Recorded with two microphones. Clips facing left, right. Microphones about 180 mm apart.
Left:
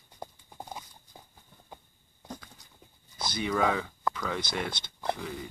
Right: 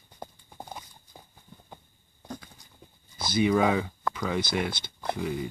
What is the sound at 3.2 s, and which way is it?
Speech, 5° right (ahead or behind).